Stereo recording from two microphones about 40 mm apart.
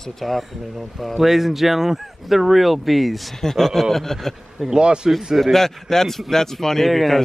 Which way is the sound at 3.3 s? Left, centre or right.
Centre.